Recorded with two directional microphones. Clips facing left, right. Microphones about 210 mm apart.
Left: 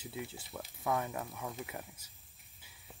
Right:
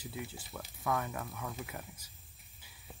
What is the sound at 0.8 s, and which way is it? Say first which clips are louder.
Speech: even; 20° left (ahead or behind).